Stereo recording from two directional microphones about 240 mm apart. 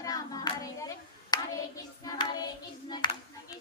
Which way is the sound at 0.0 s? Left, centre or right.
Centre.